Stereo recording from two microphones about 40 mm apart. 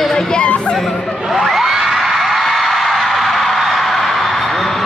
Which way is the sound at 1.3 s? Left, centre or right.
Centre.